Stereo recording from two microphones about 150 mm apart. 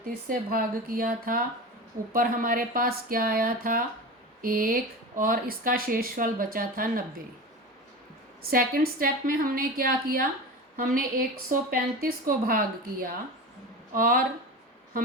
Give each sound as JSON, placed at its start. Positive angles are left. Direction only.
{"t": 0.0, "sound": "speech", "side_deg": -75}
{"t": 8.4, "sound": "a woman's voice", "side_deg": -85}